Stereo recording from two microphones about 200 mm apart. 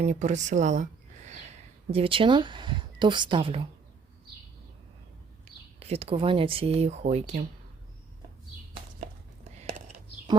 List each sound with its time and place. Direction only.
0.0 s speech: 35° right (ahead or behind)
5.5 s a sound: 30° right (ahead or behind)
5.8 s speech: 30° right (ahead or behind)
9.6 s whispering: 35° right (ahead or behind)